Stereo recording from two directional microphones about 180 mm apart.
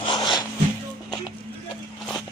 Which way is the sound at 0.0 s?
25° left (ahead or behind).